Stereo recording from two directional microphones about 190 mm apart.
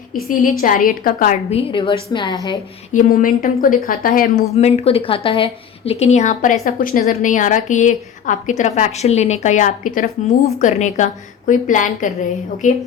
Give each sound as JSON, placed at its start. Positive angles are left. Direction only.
{"t": 0.3, "sound": "a woman's voice", "side_deg": 45}
{"t": 1.5, "sound": "a woman's voice", "side_deg": 30}
{"t": 2.9, "sound": "a woman's voice", "side_deg": 45}
{"t": 4.5, "sound": "a woman's voice", "side_deg": 35}